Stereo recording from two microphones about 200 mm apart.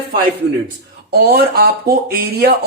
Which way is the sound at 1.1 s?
50° right (ahead or behind).